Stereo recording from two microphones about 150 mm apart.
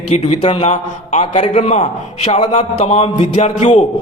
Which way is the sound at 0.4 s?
50° left (ahead or behind).